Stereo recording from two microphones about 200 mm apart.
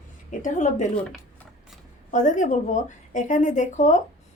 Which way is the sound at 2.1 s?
40° left (ahead or behind).